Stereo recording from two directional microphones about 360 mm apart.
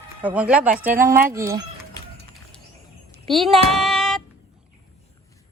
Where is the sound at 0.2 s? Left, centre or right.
Centre.